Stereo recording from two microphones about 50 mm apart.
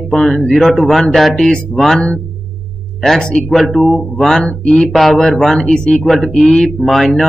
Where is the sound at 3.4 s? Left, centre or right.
Centre.